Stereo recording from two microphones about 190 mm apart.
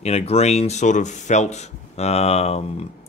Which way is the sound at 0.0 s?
35° left (ahead or behind).